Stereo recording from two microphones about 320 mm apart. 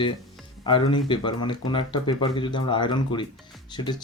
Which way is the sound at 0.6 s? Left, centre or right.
Centre.